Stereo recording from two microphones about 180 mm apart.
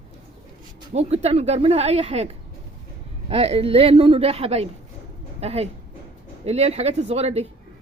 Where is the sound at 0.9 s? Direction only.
35° right (ahead or behind).